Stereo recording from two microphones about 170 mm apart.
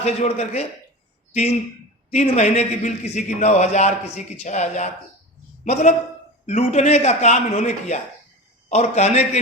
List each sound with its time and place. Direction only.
0.0 s a man's voice: 40° left (ahead or behind)